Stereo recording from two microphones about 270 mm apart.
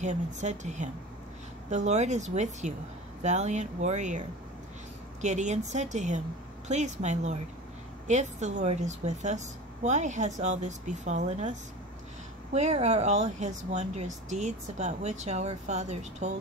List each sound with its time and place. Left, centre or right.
0.0 s speech: right
5.2 s speech: right
12.5 s speech: right